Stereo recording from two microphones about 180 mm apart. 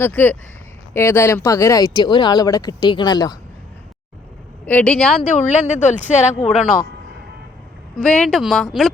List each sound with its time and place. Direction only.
0.0 s speech: 10° left (ahead or behind)
4.6 s speech: 5° left (ahead or behind)
5.3 s speech: 40° left (ahead or behind)
7.9 s speech: 5° left (ahead or behind)